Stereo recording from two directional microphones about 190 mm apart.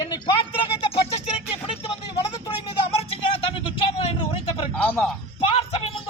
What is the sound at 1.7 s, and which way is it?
Speech, 30° left (ahead or behind).